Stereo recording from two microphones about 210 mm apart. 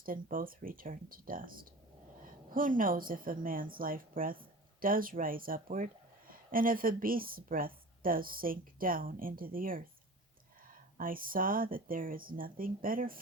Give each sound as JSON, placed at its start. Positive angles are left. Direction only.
{"t": 0.0, "sound": "a woman's voice", "side_deg": -40}